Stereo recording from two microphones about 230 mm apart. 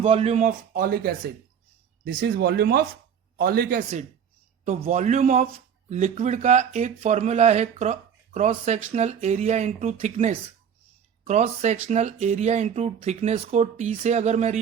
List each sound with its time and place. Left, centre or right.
0.0 s a man's voice: right